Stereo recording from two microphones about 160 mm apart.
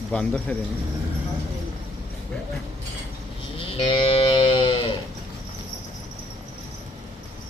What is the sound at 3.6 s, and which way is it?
Livestock, 30° left (ahead or behind).